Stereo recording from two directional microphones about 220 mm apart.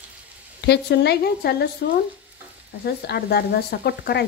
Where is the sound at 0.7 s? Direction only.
50° left (ahead or behind).